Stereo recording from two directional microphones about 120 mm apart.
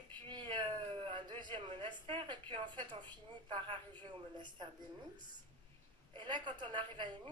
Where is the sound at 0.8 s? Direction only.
50° right (ahead or behind).